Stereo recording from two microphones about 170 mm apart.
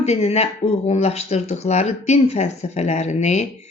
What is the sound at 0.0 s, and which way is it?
Speech, 40° left (ahead or behind).